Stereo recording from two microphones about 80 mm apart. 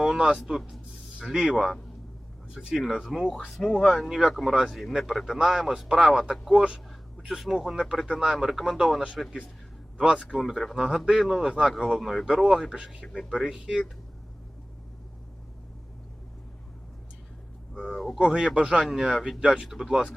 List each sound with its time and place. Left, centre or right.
0.0 s music: centre
0.3 s a man's voice: centre
10.3 s a man's voice: centre
17.8 s a man's voice: centre
18.2 s a man's voice: centre